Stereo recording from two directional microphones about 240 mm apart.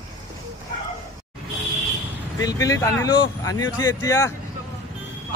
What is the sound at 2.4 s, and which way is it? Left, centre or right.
A man's voice, centre.